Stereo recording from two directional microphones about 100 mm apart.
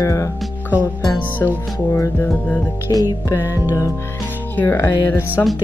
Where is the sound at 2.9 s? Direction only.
40° left (ahead or behind).